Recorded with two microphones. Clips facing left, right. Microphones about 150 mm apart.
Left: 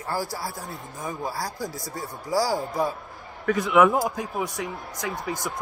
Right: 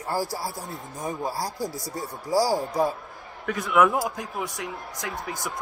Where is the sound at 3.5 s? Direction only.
Centre (ahead or behind).